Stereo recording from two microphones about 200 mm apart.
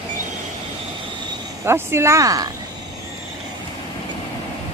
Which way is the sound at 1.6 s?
10° right (ahead or behind).